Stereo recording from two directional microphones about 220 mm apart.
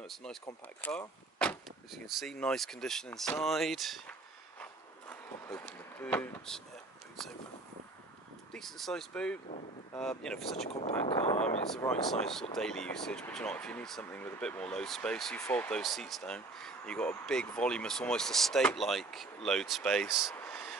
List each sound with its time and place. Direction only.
0.0 s speech: centre (ahead or behind)
4.6 s a sound: 10° left (ahead or behind)
8.5 s speech: centre (ahead or behind)
10.5 s speech: 30° left (ahead or behind)
11.9 s speech: centre (ahead or behind)
20.3 s a sound: 5° left (ahead or behind)